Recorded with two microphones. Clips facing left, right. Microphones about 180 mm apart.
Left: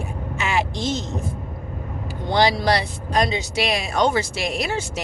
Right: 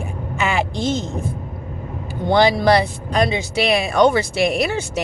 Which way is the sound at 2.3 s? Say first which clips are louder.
Right 5 dB; 55° right (ahead or behind).